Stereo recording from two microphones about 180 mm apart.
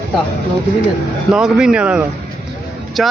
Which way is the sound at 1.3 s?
5° right (ahead or behind).